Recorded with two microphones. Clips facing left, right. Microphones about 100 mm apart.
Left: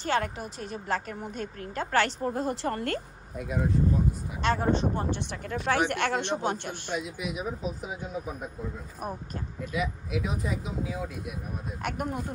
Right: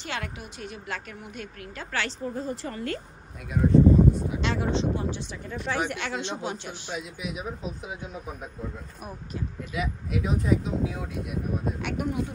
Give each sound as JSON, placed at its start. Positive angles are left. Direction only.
{"t": 0.0, "sound": "a woman's voice", "side_deg": 40}
{"t": 2.3, "sound": "speech", "side_deg": 80}
{"t": 3.7, "sound": "a sound", "side_deg": -90}
{"t": 4.4, "sound": "speech", "side_deg": 45}
{"t": 5.9, "sound": "a man's voice", "side_deg": 55}
{"t": 7.0, "sound": "speech", "side_deg": 0}
{"t": 9.7, "sound": "speech", "side_deg": 0}
{"t": 11.8, "sound": "speech", "side_deg": 45}